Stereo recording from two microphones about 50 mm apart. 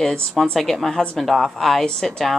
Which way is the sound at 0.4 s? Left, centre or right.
Centre.